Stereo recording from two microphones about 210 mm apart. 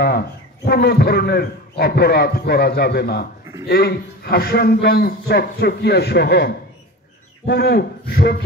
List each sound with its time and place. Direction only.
0.7 s a man's voice: 50° left (ahead or behind)